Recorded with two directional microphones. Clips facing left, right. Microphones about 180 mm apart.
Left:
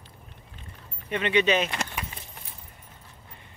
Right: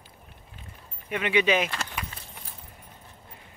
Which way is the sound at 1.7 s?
10° left (ahead or behind).